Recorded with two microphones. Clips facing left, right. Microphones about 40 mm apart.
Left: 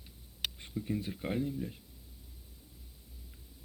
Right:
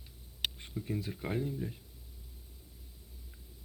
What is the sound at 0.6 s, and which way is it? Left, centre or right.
Speech, centre.